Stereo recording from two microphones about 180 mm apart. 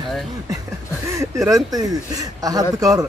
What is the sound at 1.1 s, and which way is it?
Speech, 15° right (ahead or behind).